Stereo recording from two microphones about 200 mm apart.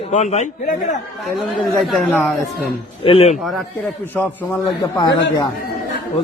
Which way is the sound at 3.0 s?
30° left (ahead or behind).